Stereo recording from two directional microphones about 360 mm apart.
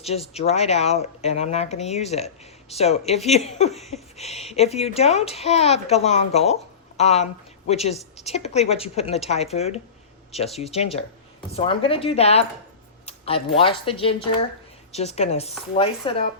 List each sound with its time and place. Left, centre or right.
0.0 s a child's voice: centre